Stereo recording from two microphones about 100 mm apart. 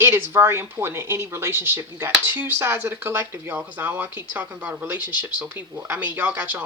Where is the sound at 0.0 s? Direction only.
25° right (ahead or behind).